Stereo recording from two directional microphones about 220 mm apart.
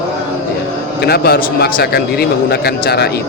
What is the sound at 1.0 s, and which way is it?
A man's voice, 45° left (ahead or behind).